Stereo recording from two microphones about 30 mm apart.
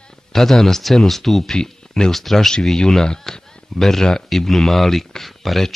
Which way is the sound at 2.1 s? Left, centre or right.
Centre.